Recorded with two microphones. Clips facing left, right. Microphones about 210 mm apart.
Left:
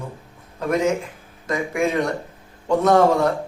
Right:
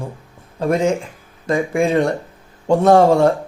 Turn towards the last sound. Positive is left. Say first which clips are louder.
# right 4 dB
turn(degrees=-30)  # may be behind; listen again after turning